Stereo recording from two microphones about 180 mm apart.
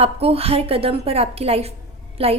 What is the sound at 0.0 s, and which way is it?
A woman's voice, 35° right (ahead or behind).